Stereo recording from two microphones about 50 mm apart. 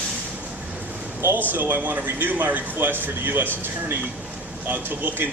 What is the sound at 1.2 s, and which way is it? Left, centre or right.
Speech, right.